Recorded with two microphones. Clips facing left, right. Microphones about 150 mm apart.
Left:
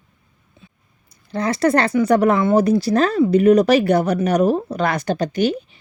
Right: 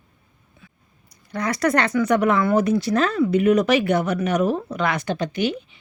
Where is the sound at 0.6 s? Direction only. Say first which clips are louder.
Left 3 dB; 25° left (ahead or behind).